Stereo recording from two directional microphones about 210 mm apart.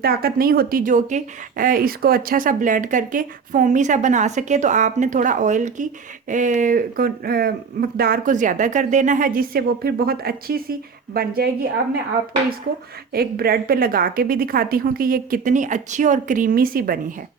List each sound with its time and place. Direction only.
0.0 s speech: 45° right (ahead or behind)
13.1 s a woman's voice: 45° right (ahead or behind)